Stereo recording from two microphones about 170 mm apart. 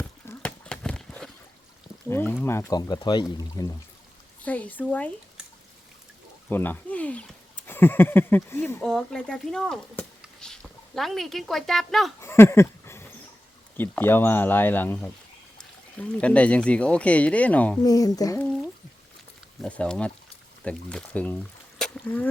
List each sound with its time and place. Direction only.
0.0 s horse: 10° left (ahead or behind)
2.0 s speech: 15° left (ahead or behind)
4.4 s speech: 10° left (ahead or behind)
6.5 s speech: 10° left (ahead or behind)
10.2 s a sound: 5° left (ahead or behind)
12.2 s a sound: 15° left (ahead or behind)
13.7 s speech: 10° left (ahead or behind)
17.8 s speech: 20° left (ahead or behind)
19.6 s speech: 5° left (ahead or behind)
21.8 s a sound: 5° left (ahead or behind)